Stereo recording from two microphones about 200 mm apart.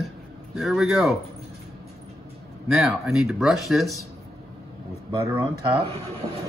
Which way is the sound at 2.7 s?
Centre (ahead or behind).